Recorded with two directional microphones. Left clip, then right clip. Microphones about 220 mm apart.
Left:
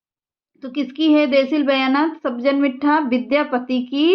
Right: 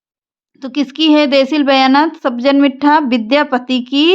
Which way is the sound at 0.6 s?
45° right (ahead or behind).